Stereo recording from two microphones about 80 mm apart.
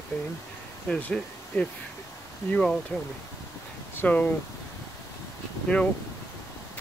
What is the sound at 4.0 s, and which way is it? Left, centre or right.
Speech, left.